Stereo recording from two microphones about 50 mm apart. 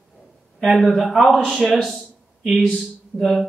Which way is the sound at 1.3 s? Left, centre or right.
Centre.